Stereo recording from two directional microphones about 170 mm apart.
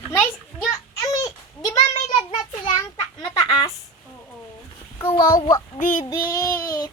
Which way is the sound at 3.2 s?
30° left (ahead or behind).